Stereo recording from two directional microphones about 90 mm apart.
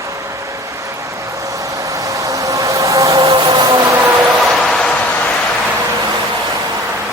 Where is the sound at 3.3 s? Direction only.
90° right.